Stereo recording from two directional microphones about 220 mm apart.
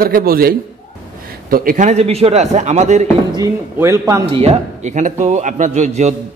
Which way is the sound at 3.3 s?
15° right (ahead or behind).